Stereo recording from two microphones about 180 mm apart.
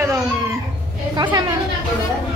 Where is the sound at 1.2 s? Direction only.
25° right (ahead or behind).